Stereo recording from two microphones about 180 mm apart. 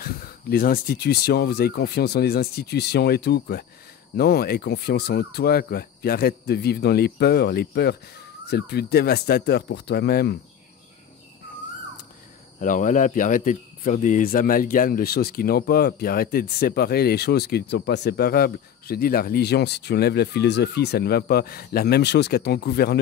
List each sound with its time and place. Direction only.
0.0 s speech: 55° left (ahead or behind)
12.5 s speech: 45° left (ahead or behind); by 22.9 s 65° left (ahead or behind)